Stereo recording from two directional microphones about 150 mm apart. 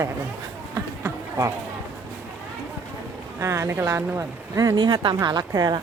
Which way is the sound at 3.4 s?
20° right (ahead or behind).